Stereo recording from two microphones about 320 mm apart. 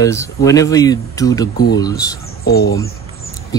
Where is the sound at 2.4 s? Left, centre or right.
Left.